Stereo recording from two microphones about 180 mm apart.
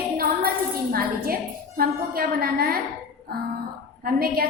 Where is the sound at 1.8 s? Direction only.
55° right (ahead or behind).